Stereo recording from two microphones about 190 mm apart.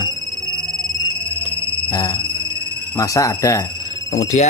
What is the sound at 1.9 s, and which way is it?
Speech, 20° left (ahead or behind).